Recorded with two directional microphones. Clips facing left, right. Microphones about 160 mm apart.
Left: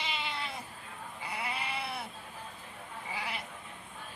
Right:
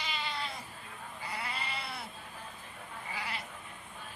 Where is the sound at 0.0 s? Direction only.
20° left (ahead or behind).